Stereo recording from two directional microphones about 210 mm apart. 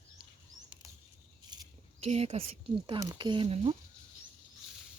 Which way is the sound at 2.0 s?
30° right (ahead or behind).